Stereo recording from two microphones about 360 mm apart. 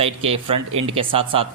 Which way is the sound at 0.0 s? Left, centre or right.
Centre.